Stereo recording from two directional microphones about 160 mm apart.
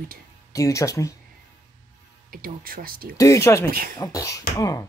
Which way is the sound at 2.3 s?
65° right (ahead or behind).